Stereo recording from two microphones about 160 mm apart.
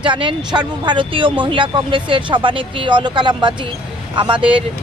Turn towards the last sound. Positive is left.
turn(degrees=-30)  # may be behind; listen again after turning